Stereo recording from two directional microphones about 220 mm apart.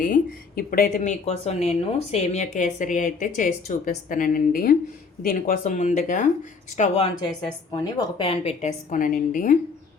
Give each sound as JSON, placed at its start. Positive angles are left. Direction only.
{"t": 0.0, "sound": "speech", "side_deg": 40}